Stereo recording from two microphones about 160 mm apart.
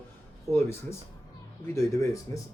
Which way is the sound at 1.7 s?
20° left (ahead or behind).